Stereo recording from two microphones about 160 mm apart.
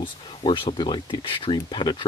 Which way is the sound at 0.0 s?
30° left (ahead or behind).